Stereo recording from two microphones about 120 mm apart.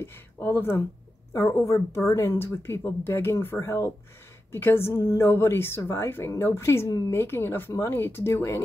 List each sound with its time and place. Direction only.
0.0 s a woman's voice: 20° left (ahead or behind)